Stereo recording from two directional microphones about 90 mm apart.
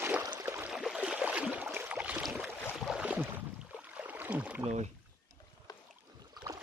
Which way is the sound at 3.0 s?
20° right (ahead or behind).